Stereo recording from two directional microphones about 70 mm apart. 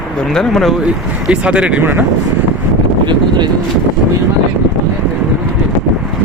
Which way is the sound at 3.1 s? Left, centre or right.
Right.